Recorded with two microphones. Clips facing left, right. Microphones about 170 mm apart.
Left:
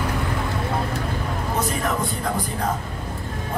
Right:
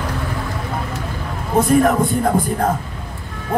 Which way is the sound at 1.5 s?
50° right (ahead or behind).